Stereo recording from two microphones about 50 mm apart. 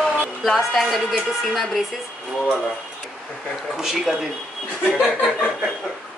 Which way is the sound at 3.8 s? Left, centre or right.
Centre.